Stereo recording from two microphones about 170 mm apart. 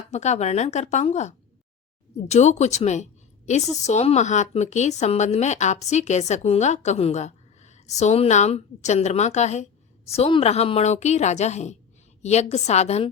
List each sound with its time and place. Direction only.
0.1 s speech: 40° left (ahead or behind)
2.3 s a woman's voice: 40° left (ahead or behind)